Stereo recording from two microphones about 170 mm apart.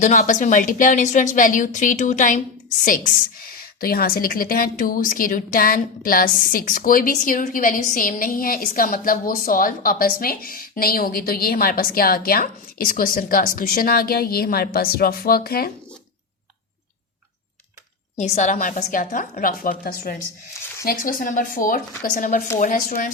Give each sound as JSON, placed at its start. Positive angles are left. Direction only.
{"t": 0.0, "sound": "a woman's voice", "side_deg": 50}
{"t": 18.2, "sound": "a woman's voice", "side_deg": 45}